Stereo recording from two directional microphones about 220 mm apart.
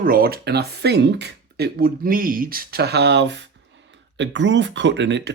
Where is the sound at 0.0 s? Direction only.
40° right (ahead or behind).